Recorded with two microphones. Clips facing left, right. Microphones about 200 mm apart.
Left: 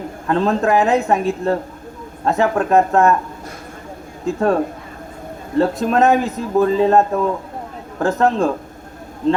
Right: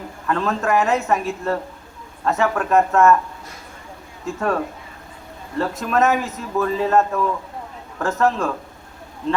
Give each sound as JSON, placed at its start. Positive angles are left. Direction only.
{"t": 0.3, "sound": "a man's voice", "side_deg": 30}
{"t": 4.4, "sound": "a man's voice", "side_deg": 30}